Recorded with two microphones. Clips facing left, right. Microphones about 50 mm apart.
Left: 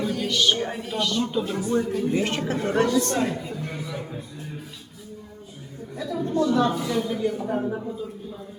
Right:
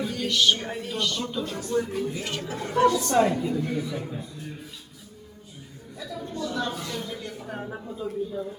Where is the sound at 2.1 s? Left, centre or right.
Left.